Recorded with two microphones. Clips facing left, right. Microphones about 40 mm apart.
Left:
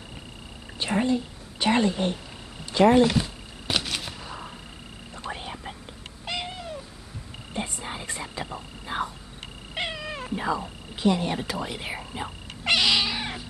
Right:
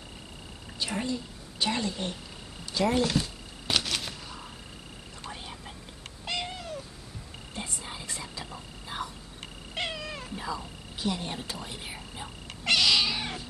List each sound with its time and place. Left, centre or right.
0.7 s a woman's voice: left
2.6 s a sound: left
2.9 s speech: left
3.6 s a sound: centre
5.3 s whispering: left
6.2 s cat: centre
7.5 s a sound: left
9.8 s cat: centre
10.3 s a sound: left
11.6 s speech: left
12.0 s whispering: left
12.7 s cat: centre